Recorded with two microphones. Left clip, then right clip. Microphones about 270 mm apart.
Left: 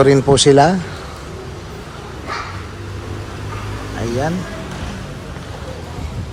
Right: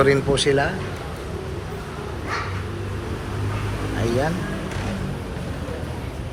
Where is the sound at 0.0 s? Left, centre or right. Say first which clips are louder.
Left 7 dB; left.